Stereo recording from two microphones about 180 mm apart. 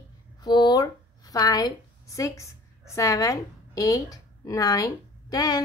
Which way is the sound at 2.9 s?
15° left (ahead or behind).